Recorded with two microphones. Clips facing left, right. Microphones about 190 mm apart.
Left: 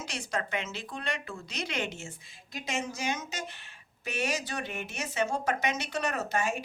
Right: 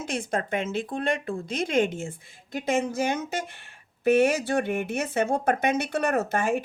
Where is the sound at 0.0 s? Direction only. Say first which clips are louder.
Right 6 dB; 50° right (ahead or behind).